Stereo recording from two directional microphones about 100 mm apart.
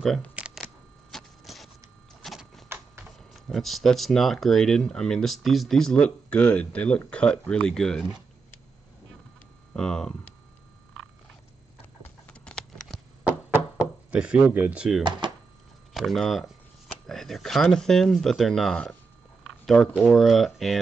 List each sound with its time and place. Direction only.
0.0 s speech: 5° left (ahead or behind)
1.1 s a sound: centre (ahead or behind)
2.2 s printer: centre (ahead or behind)
3.4 s speech: 5° left (ahead or behind)
9.8 s speech: 5° left (ahead or behind)
12.3 s a sound: 10° left (ahead or behind)
14.1 s speech: 10° right (ahead or behind)
15.0 s speech: 50° right (ahead or behind)
15.9 s shuffling cards: centre (ahead or behind)
16.9 s speech: 5° left (ahead or behind)